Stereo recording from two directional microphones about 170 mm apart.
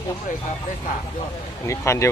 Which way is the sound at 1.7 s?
15° left (ahead or behind).